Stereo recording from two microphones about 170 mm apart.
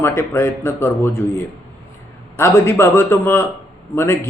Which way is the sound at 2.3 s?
15° left (ahead or behind).